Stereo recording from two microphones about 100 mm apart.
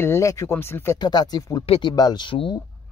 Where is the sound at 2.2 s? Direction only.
55° left (ahead or behind).